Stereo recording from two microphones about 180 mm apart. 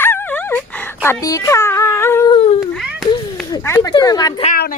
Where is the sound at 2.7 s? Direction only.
Centre (ahead or behind).